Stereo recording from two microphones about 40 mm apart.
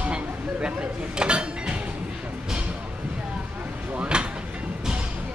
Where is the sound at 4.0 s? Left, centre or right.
Right.